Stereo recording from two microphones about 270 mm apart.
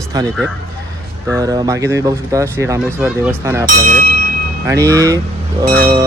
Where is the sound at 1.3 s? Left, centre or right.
Centre.